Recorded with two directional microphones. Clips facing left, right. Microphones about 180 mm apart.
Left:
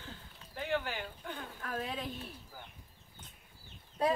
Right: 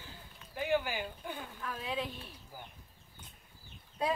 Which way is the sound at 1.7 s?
45° left (ahead or behind).